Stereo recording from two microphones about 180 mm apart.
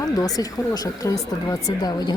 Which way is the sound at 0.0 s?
20° left (ahead or behind).